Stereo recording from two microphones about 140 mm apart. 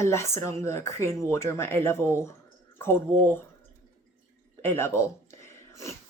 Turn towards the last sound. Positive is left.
turn(degrees=20)  # may be behind; listen again after turning